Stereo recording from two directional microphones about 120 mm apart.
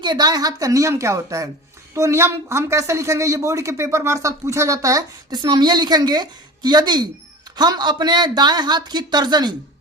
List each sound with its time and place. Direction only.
0.0 s speech: 35° right (ahead or behind)